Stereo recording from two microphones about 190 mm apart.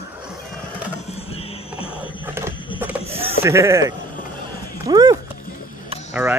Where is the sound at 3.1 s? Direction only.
30° right (ahead or behind).